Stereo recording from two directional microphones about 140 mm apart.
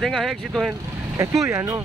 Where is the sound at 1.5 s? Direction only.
20° right (ahead or behind).